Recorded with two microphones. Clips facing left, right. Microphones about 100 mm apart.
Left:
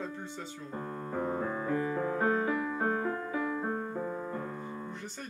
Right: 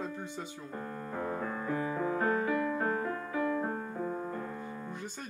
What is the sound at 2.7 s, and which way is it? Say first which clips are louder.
Music: left 1 dB; 30° left (ahead or behind).